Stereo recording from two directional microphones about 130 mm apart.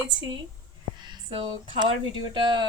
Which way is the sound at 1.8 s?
35° right (ahead or behind).